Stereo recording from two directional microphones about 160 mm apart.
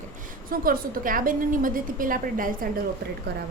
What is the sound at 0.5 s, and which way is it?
A woman's voice, 65° right (ahead or behind).